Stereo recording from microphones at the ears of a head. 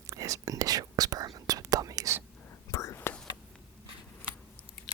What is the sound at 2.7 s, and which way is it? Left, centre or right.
Whispering, left.